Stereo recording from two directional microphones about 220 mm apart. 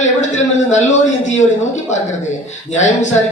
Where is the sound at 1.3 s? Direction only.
30° left (ahead or behind).